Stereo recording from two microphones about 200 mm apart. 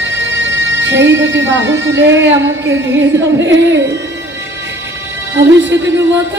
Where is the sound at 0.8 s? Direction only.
65° right (ahead or behind).